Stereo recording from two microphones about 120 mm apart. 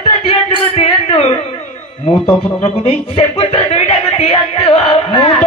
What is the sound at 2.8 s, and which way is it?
Speech, 55° left (ahead or behind).